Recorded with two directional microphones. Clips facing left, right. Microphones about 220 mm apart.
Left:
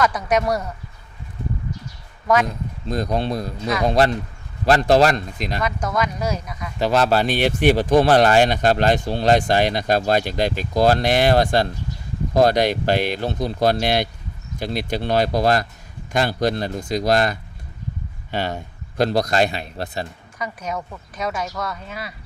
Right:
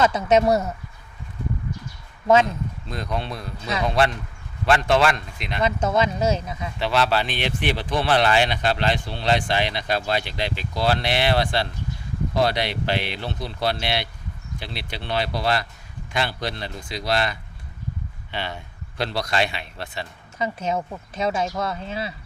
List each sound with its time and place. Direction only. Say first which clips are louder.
0.0 s speech: right 2 dB; 25° right (ahead or behind)
2.2 s speech: right 2 dB; 25° right (ahead or behind)
2.9 s a man's voice: left 8 dB; 40° left (ahead or behind)
5.6 s speech: right 4 dB; 25° right (ahead or behind)
6.7 s speech: left 4 dB; 45° left (ahead or behind)
20.4 s speech: right 3 dB; 25° right (ahead or behind)